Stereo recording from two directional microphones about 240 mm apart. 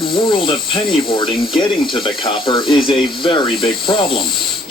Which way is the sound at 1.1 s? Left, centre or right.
Left.